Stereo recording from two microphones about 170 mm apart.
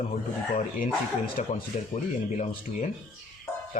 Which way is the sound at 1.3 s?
40° left (ahead or behind).